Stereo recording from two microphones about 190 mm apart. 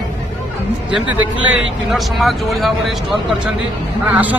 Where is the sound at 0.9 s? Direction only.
10° right (ahead or behind).